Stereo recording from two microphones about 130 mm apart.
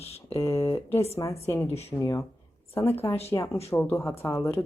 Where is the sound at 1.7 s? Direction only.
55° left (ahead or behind).